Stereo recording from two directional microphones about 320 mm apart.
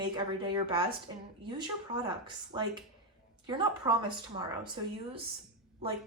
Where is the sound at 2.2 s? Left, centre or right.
Centre.